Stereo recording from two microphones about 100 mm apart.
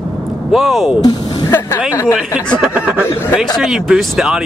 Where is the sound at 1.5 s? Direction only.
20° left (ahead or behind).